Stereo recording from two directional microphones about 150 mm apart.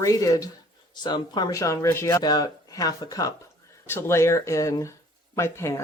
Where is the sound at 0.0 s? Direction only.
20° left (ahead or behind).